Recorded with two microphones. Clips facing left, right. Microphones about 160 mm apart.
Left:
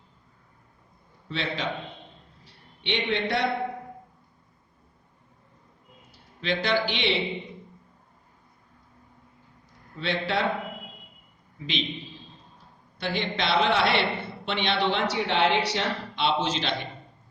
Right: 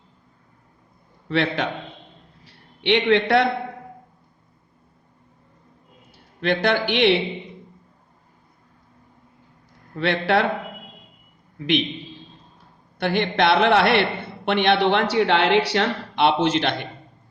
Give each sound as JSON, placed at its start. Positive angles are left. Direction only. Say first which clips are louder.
{"t": 1.3, "sound": "a man's voice", "louder": "right 9 dB", "side_deg": -65}
{"t": 2.4, "sound": "a sound", "louder": "right 11 dB", "side_deg": -70}
{"t": 6.1, "sound": "a man's voice", "louder": "right 6 dB", "side_deg": -60}
{"t": 9.9, "sound": "a man's voice", "louder": "right 7 dB", "side_deg": -65}
{"t": 11.5, "sound": "a man's voice", "louder": "right 11 dB", "side_deg": -65}
{"t": 13.0, "sound": "a man's voice", "louder": "right 8 dB", "side_deg": -65}